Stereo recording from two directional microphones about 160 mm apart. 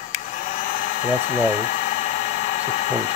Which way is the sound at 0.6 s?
55° left (ahead or behind).